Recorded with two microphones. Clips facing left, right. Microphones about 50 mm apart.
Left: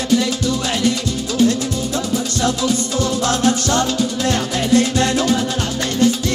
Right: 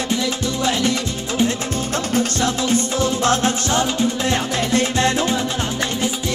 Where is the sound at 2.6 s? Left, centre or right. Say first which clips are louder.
Even; right.